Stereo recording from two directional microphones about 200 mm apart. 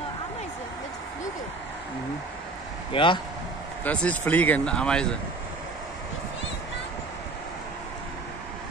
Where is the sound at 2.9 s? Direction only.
25° left (ahead or behind).